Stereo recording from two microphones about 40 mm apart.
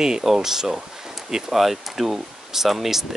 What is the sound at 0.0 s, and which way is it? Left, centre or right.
Speech, centre.